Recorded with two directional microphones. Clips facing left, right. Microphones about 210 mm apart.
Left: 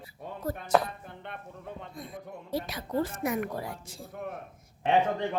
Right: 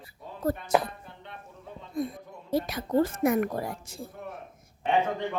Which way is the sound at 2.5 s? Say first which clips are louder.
Right 5 dB; 50° right (ahead or behind).